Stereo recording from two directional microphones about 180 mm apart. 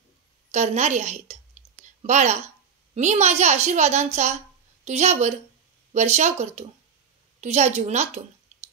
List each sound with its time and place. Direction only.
0.5 s a woman's voice: 40° right (ahead or behind)